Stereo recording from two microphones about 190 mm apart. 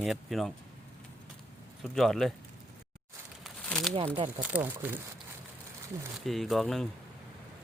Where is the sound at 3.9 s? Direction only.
30° right (ahead or behind).